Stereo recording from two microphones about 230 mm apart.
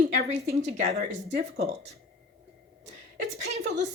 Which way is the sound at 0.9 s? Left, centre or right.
Right.